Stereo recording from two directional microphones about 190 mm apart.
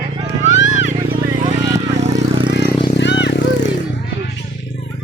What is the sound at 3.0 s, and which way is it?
Vehicle, 65° left (ahead or behind).